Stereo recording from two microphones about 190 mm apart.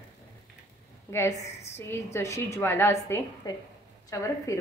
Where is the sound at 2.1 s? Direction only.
15° left (ahead or behind).